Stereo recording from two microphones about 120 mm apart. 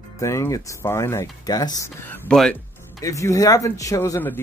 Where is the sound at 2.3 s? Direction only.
5° left (ahead or behind).